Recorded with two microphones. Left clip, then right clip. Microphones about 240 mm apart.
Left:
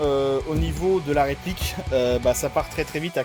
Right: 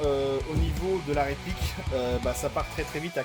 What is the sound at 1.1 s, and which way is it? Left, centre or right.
Speech, left.